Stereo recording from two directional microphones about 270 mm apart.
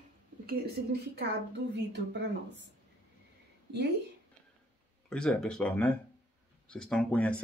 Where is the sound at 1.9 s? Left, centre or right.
Right.